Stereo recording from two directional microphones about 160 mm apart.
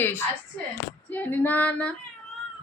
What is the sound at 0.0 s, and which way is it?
Speech, 15° left (ahead or behind).